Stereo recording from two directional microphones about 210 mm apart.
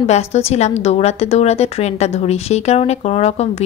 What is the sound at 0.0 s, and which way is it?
A woman's voice, 30° left (ahead or behind).